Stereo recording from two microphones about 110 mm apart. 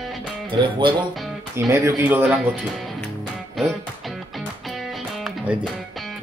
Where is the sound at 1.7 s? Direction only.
25° right (ahead or behind).